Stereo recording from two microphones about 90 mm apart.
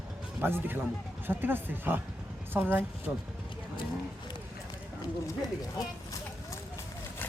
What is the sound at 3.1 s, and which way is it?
Speech, 15° right (ahead or behind).